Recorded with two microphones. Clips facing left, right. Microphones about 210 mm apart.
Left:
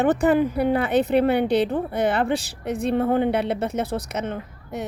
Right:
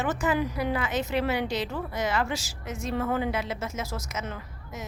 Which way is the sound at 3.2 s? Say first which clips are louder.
Left 8 dB; 65° left (ahead or behind).